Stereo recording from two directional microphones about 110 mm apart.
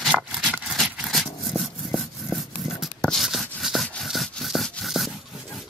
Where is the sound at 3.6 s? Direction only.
Centre (ahead or behind).